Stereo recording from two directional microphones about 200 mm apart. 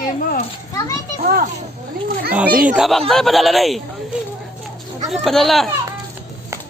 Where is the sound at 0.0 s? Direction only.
40° left (ahead or behind).